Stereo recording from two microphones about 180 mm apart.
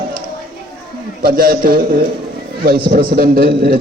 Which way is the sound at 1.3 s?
55° right (ahead or behind).